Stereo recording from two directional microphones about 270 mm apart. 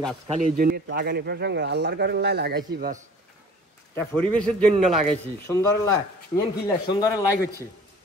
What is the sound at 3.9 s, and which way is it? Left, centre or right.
A man's voice, centre.